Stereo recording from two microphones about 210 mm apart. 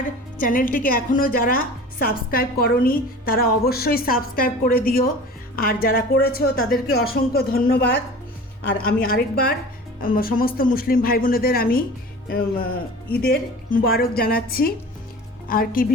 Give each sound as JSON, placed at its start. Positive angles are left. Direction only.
{"t": 0.3, "sound": "a woman's voice", "side_deg": 40}